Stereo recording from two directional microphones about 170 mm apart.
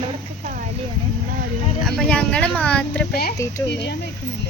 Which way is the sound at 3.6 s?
80° left.